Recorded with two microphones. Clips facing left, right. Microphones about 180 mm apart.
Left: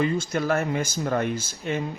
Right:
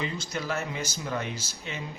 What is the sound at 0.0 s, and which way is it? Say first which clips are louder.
Speech: left 9 dB; 50° left (ahead or behind).